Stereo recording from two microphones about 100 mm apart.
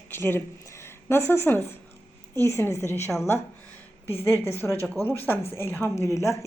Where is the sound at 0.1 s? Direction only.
20° left (ahead or behind).